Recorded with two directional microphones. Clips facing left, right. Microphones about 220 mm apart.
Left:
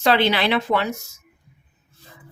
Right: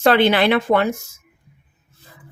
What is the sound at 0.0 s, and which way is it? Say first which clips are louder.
Speech: right 4 dB; 50° right (ahead or behind).